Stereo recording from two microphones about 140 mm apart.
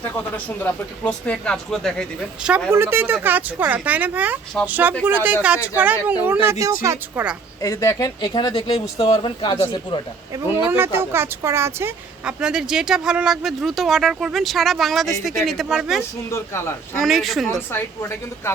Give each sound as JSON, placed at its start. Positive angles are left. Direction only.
{"t": 0.3, "sound": "speech", "side_deg": 10}
{"t": 2.6, "sound": "speech", "side_deg": -15}
{"t": 7.6, "sound": "speech", "side_deg": 25}
{"t": 8.3, "sound": "speech", "side_deg": 35}
{"t": 10.7, "sound": "speech", "side_deg": -15}
{"t": 12.2, "sound": "speech", "side_deg": -5}
{"t": 16.3, "sound": "speech", "side_deg": 20}
{"t": 17.0, "sound": "speech", "side_deg": 0}
{"t": 17.7, "sound": "speech", "side_deg": 15}